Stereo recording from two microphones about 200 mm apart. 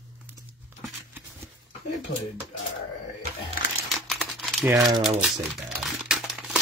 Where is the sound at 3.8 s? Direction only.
Centre (ahead or behind).